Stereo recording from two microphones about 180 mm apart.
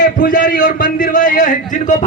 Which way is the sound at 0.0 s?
50° left (ahead or behind).